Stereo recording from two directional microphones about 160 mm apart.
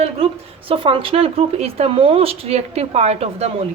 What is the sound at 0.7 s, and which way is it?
Speech, 35° right (ahead or behind).